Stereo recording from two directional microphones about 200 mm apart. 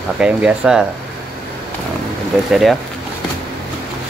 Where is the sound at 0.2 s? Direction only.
5° right (ahead or behind).